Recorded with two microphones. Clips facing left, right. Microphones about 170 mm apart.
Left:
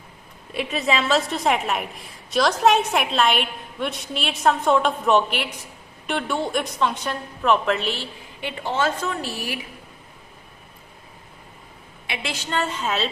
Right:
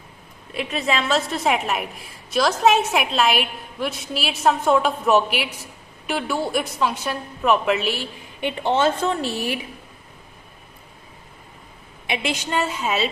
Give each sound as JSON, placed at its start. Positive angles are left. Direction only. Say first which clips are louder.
{"t": 0.5, "sound": "a woman's voice", "louder": "even", "side_deg": 0}
{"t": 8.4, "sound": "a woman's voice", "louder": "right 4 dB", "side_deg": -20}
{"t": 12.0, "sound": "a woman's voice", "louder": "right 5 dB", "side_deg": -15}